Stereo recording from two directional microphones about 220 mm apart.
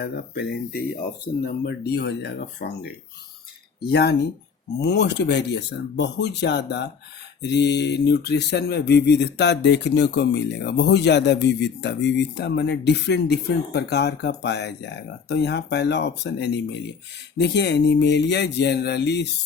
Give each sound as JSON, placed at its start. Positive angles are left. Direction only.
{"t": 0.0, "sound": "speech", "side_deg": 45}